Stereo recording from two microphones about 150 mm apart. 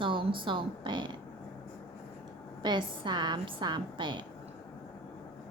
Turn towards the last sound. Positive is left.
turn(degrees=-30)  # may be behind; listen again after turning